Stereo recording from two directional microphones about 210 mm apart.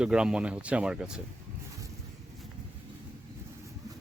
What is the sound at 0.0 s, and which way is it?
Speech, 5° right (ahead or behind).